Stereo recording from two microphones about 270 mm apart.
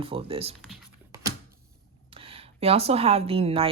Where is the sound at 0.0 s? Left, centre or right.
Right.